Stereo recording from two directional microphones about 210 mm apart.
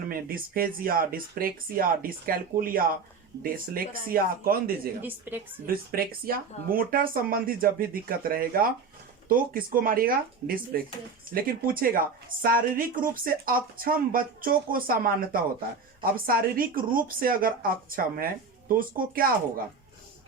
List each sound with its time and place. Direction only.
0.1 s a woman's voice: 45° right (ahead or behind)
5.3 s a woman's voice: 10° right (ahead or behind)
5.6 s a woman's voice: 45° right (ahead or behind)